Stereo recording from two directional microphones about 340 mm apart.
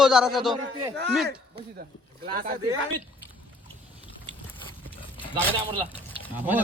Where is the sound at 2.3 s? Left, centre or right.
Right.